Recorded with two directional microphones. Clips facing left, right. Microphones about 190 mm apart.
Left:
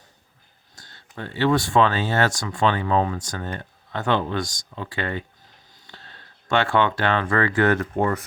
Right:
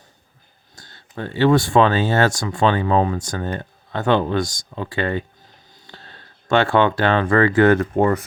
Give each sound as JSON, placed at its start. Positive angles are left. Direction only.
{"t": 0.8, "sound": "speech", "side_deg": -35}